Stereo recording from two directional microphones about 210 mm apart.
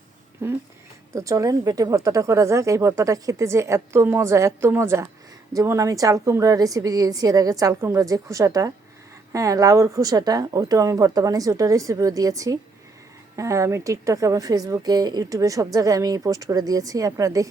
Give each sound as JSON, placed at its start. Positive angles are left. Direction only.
{"t": 1.1, "sound": "a woman's voice", "side_deg": -15}